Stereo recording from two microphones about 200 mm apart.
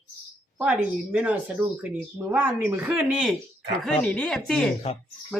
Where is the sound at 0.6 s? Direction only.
5° right (ahead or behind).